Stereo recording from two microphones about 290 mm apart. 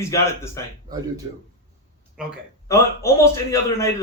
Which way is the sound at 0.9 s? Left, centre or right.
Centre.